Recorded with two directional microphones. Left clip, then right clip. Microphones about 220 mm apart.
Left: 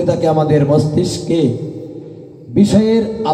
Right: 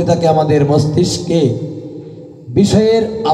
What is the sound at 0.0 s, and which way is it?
A man's voice, 30° right (ahead or behind).